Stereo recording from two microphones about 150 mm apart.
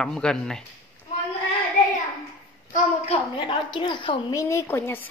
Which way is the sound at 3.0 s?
45° left (ahead or behind).